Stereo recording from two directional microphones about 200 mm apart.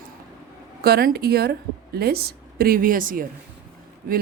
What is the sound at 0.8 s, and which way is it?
A woman's voice, 50° right (ahead or behind).